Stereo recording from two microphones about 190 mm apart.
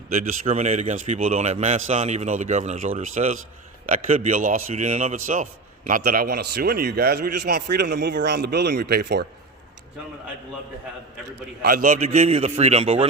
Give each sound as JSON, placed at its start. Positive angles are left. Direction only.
{"t": 0.1, "sound": "a man's voice", "side_deg": -40}
{"t": 11.6, "sound": "a man's voice", "side_deg": -50}
{"t": 11.9, "sound": "speech", "side_deg": -35}